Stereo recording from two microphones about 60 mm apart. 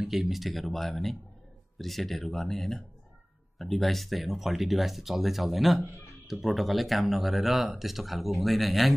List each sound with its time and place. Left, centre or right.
0.0 s speech: centre